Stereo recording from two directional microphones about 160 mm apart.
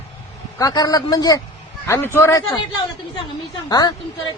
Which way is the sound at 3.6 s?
25° left (ahead or behind).